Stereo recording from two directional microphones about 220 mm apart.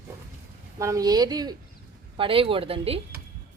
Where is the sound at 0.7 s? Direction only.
15° right (ahead or behind).